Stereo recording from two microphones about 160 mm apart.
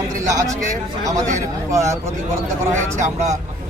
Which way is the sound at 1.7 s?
20° right (ahead or behind).